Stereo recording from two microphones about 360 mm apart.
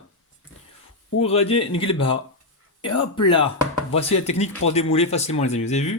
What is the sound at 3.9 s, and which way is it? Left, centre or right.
Speech, centre.